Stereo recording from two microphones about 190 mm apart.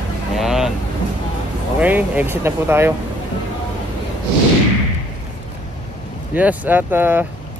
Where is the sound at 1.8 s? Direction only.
10° right (ahead or behind).